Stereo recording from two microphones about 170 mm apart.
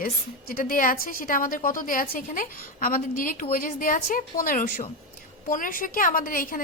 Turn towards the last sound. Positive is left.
turn(degrees=55)  # may be behind; listen again after turning